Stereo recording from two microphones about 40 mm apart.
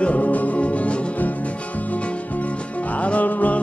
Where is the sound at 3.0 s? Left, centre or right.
Left.